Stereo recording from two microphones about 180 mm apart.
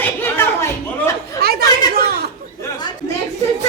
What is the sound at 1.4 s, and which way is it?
Chatter, 60° right (ahead or behind).